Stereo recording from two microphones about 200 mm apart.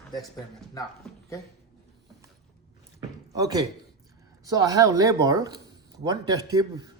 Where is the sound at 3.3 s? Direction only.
20° right (ahead or behind).